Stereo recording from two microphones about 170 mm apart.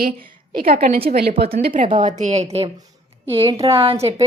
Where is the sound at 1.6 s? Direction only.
55° right (ahead or behind); by 3.9 s 30° right (ahead or behind).